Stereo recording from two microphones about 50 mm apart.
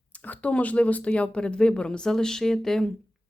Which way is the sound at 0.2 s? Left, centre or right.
Left.